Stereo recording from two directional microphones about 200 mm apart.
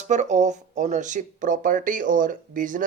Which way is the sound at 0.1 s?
35° right (ahead or behind).